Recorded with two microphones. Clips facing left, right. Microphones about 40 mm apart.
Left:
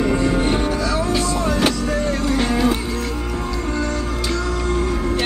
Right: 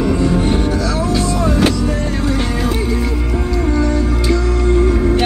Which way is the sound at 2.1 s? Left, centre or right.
Centre.